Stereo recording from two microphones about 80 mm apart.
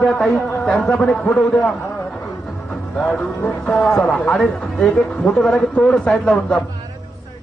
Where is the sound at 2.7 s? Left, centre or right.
Centre.